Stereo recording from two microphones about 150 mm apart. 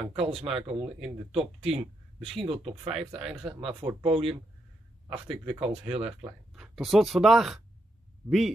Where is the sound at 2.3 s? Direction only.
40° right (ahead or behind).